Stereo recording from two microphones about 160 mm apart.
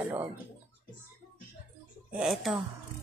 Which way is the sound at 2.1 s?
5° right (ahead or behind).